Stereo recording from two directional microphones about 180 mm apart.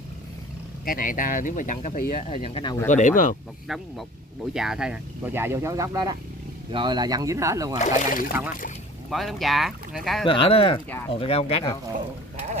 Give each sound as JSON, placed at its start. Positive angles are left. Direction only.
{"t": 0.8, "sound": "speech", "side_deg": 50}
{"t": 2.9, "sound": "speech", "side_deg": 45}
{"t": 4.6, "sound": "speech", "side_deg": -5}
{"t": 7.8, "sound": "speech", "side_deg": 50}
{"t": 9.1, "sound": "speech", "side_deg": 0}
{"t": 10.2, "sound": "speech", "side_deg": 30}